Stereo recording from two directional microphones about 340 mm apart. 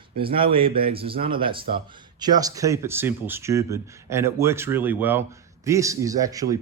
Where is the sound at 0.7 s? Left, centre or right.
Right.